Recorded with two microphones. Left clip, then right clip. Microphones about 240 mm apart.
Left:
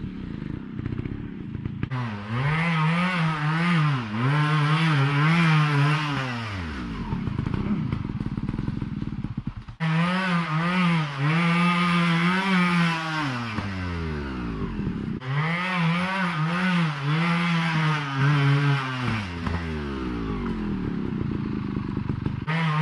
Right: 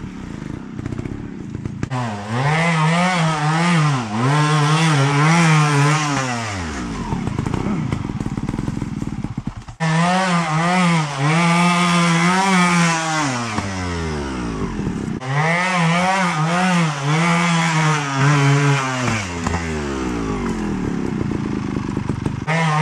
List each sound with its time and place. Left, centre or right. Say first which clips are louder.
2.3 s chainsaw: right 8 dB; centre
9.9 s chainsaw: right 8 dB; centre
15.3 s chainsaw: right 9 dB; centre